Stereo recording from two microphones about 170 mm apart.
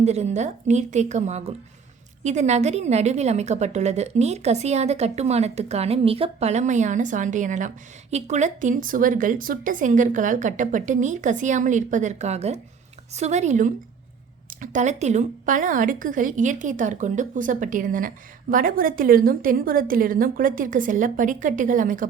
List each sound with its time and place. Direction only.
0.0 s a woman's voice: 40° right (ahead or behind)